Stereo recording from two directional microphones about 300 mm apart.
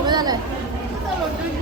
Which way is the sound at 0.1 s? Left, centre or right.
Centre.